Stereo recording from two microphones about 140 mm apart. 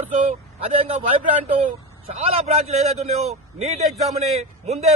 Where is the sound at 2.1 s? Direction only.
50° right (ahead or behind).